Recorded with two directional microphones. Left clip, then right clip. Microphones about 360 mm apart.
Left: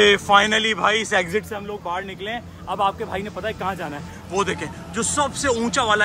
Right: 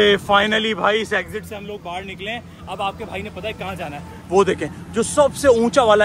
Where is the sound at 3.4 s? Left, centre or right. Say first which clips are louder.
Left 2 dB; centre.